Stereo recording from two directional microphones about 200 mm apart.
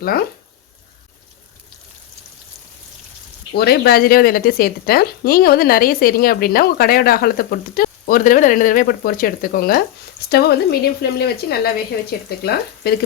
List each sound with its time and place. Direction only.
0.0 s speech: 50° left (ahead or behind)
3.5 s speech: 50° left (ahead or behind)